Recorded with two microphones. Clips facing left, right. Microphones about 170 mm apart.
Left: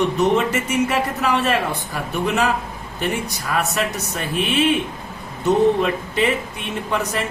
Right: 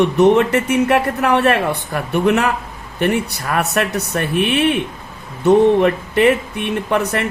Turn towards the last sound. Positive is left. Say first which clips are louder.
# right 5 dB
turn(degrees=-60)  # may be behind; listen again after turning